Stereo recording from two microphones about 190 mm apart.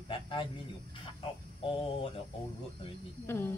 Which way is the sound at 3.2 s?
10° left (ahead or behind).